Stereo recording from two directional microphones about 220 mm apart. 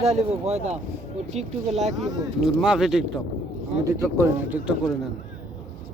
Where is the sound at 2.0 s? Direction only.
Centre (ahead or behind).